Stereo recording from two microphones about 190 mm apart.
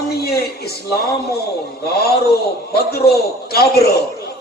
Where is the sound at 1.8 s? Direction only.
55° left (ahead or behind).